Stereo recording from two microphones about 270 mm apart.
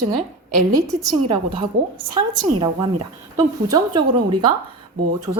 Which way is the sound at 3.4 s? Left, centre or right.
Centre.